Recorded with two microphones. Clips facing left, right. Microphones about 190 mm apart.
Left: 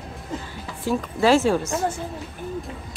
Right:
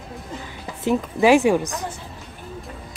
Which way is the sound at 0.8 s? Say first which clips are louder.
Right 3 dB; 20° right (ahead or behind).